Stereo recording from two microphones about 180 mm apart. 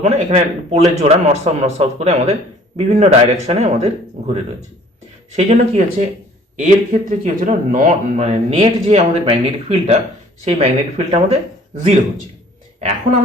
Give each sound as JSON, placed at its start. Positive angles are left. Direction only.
{"t": 0.0, "sound": "speech", "side_deg": -35}
{"t": 5.4, "sound": "speech", "side_deg": -40}